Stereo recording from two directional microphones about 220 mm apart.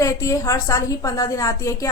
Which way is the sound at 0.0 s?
15° left (ahead or behind).